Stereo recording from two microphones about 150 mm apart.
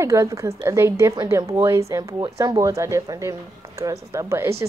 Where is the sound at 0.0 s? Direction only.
20° right (ahead or behind).